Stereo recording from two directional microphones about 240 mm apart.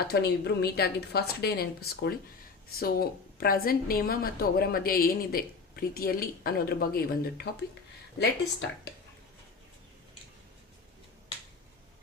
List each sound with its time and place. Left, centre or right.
0.1 s a woman's voice: left